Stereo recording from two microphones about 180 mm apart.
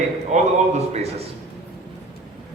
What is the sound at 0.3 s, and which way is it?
Speech, 40° right (ahead or behind).